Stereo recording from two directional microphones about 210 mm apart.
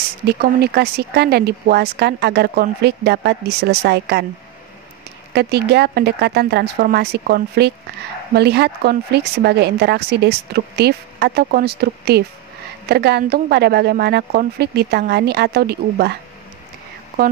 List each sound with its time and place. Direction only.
0.3 s speech: 50° right (ahead or behind)
5.3 s speech: 50° right (ahead or behind)